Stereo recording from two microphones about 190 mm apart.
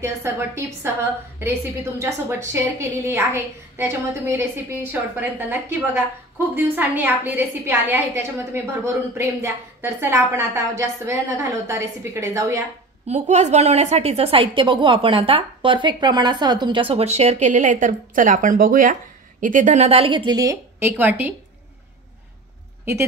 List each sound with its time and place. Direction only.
0.0 s a woman's voice: 15° right (ahead or behind)
13.0 s a woman's voice: 35° right (ahead or behind); by 21.3 s 10° right (ahead or behind)